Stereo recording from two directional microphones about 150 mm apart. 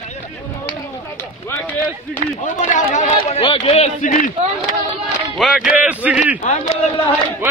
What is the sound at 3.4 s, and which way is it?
Speech, 40° left (ahead or behind).